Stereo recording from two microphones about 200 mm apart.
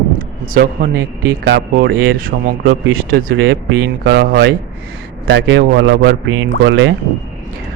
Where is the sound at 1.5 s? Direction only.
60° right (ahead or behind).